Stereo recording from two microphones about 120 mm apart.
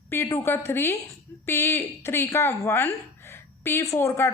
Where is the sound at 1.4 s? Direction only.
20° left (ahead or behind).